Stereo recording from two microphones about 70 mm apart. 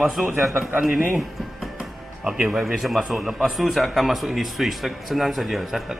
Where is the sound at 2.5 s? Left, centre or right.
Centre.